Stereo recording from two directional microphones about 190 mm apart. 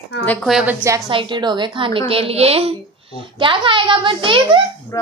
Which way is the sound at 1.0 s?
25° right (ahead or behind).